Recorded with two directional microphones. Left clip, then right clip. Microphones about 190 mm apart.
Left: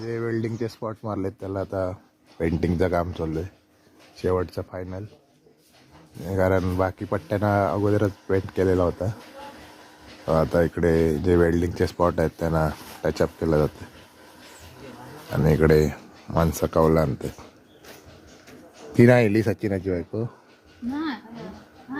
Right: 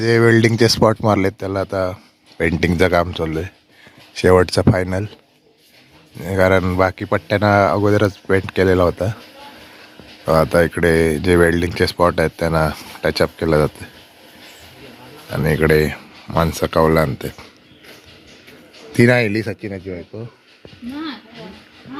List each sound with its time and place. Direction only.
0.0 s speech: 35° right (ahead or behind)
1.7 s speech: 5° right (ahead or behind)
4.1 s speech: 25° right (ahead or behind)
6.4 s speech: 10° right (ahead or behind)
8.9 s speech: 25° right (ahead or behind)
10.2 s speech: 20° right (ahead or behind)
10.6 s speech: 10° right (ahead or behind)
15.5 s speech: centre (ahead or behind)
18.9 s speech: 5° left (ahead or behind)